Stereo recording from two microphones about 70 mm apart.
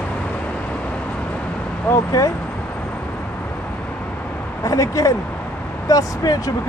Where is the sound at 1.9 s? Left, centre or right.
Left.